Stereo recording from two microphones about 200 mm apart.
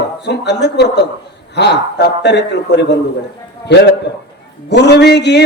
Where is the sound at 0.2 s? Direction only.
60° left (ahead or behind).